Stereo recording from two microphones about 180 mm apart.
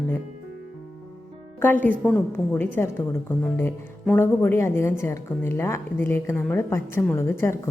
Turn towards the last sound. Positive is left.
turn(degrees=15)  # may be behind; listen again after turning